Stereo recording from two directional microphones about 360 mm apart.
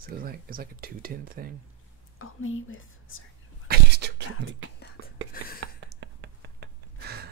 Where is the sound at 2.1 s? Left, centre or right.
Left.